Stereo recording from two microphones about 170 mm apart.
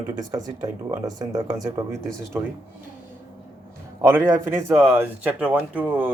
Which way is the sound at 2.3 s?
10° right (ahead or behind).